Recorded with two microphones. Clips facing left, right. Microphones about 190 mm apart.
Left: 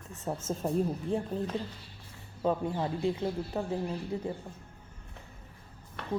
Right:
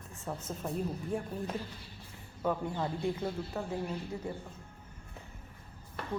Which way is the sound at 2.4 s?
20° left (ahead or behind).